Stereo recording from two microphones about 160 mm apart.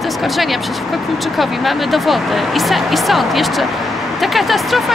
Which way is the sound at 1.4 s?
Centre (ahead or behind).